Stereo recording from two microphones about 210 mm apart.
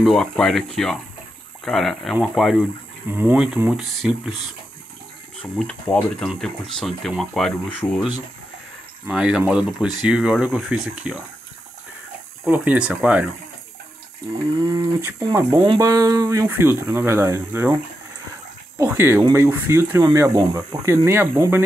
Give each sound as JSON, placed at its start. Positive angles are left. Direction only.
{"t": 0.0, "sound": "speech", "side_deg": 0}
{"t": 5.6, "sound": "speech", "side_deg": 5}
{"t": 12.4, "sound": "speech", "side_deg": -10}
{"t": 14.6, "sound": "speech", "side_deg": -15}
{"t": 18.8, "sound": "speech", "side_deg": -10}